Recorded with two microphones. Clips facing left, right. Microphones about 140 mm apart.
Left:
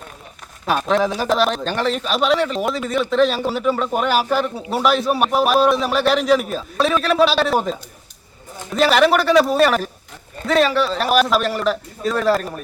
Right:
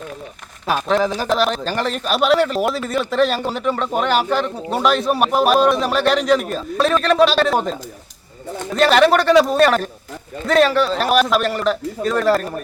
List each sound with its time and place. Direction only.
0.7 s a man's voice: centre (ahead or behind)